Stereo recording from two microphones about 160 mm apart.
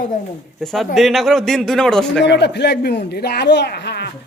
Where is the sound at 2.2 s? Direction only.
90° left.